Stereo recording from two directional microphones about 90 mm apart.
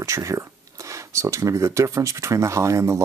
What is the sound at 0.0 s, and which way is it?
Speech, 35° right (ahead or behind).